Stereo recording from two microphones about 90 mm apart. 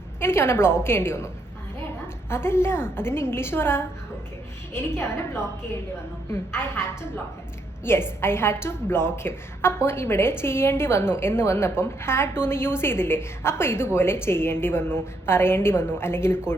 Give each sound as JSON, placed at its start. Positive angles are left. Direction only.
{"t": 0.2, "sound": "a woman's voice", "side_deg": 25}
{"t": 2.3, "sound": "a woman's voice", "side_deg": 30}
{"t": 7.9, "sound": "a woman's voice", "side_deg": 25}